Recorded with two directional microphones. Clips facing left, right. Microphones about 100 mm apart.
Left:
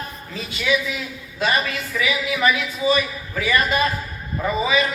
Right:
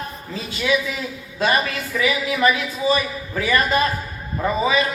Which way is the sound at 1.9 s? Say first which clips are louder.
Right 3 dB; 10° right (ahead or behind).